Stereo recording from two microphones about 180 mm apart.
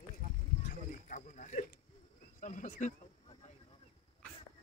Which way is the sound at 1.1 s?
45° left (ahead or behind).